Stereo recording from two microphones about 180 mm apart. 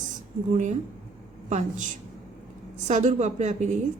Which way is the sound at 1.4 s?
40° right (ahead or behind).